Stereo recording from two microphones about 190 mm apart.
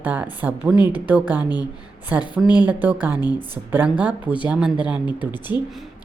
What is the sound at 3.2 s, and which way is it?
Speech, 20° left (ahead or behind).